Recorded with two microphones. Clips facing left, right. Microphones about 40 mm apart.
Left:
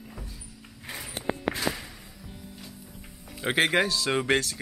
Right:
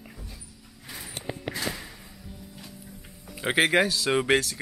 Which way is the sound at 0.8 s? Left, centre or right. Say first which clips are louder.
Left 2 dB; left.